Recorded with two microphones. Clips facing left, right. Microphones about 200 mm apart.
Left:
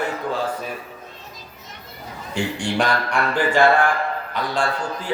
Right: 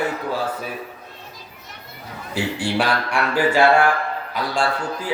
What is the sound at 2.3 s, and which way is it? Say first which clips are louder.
A man's voice: right 1 dB; 5° right (ahead or behind).